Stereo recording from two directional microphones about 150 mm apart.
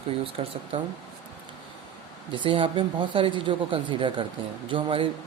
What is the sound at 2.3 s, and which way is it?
A woman's voice, 35° right (ahead or behind).